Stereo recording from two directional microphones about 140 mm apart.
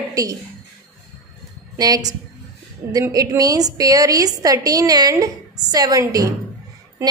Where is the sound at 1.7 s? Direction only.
25° right (ahead or behind).